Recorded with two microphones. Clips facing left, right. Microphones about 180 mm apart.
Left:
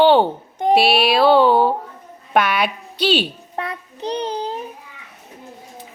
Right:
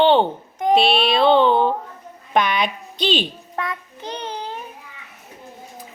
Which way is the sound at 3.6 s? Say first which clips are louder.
Left 1 dB; 30° left (ahead or behind).